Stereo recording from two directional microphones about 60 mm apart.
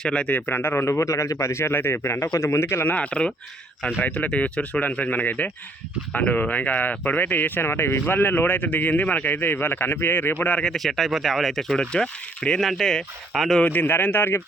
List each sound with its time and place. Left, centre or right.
0.0 s speech: centre
0.3 s speech: left
2.9 s speech: left
10.6 s speech: centre
11.8 s speech: centre
12.5 s speech: centre
13.3 s speech: centre
13.7 s speech: left